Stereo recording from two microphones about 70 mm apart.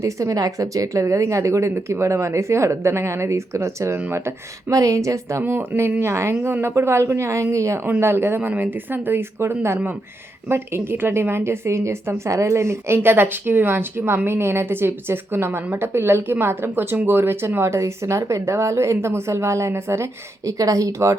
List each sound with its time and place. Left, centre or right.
0.0 s speech: right
4.7 s speech: right
5.4 s a woman's voice: right
7.9 s a woman's voice: right